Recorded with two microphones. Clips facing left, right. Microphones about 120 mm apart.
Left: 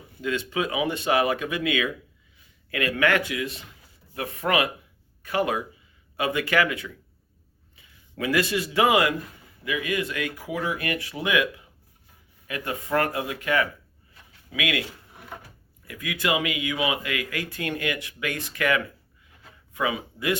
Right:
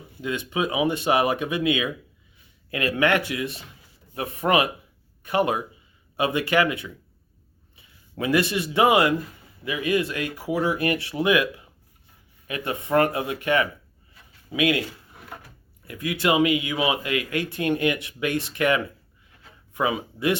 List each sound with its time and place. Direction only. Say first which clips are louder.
0.2 s speech: right 1 dB; 20° right (ahead or behind)
12.5 s speech: right 3 dB; 20° right (ahead or behind)
15.9 s speech: right 4 dB; 30° right (ahead or behind)